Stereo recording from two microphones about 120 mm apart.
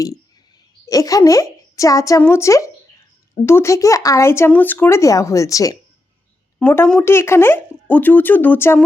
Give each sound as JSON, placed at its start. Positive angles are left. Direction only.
{"t": 0.9, "sound": "a woman's voice", "side_deg": 30}
{"t": 6.6, "sound": "speech", "side_deg": 15}